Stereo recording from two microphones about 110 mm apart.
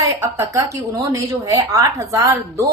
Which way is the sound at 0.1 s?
30° right (ahead or behind).